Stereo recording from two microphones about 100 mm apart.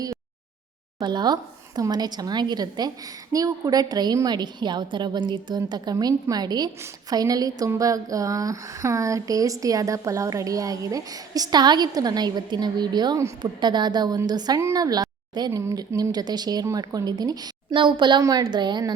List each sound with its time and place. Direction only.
1.0 s a woman's voice: 45° right (ahead or behind)
17.7 s a woman's voice: 55° right (ahead or behind)
18.2 s speech: 40° right (ahead or behind)